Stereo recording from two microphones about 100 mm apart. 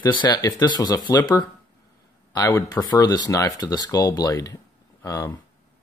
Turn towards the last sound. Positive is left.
turn(degrees=35)  # may be behind; listen again after turning